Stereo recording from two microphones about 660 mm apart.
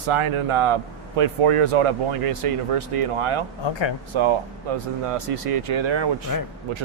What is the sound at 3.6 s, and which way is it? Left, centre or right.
Speech, left.